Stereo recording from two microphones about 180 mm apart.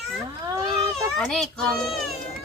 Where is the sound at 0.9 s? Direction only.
Centre (ahead or behind).